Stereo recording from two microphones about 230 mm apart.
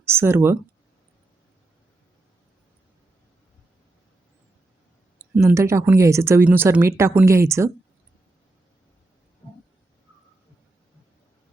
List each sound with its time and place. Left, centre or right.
0.0 s speech: centre
5.3 s speech: centre